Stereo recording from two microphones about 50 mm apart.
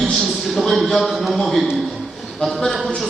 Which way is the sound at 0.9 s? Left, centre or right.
Centre.